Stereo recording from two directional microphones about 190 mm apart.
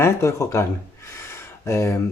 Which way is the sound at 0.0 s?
15° left (ahead or behind).